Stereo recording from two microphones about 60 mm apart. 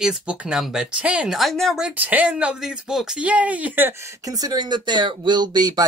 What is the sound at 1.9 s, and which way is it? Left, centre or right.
Speech, right.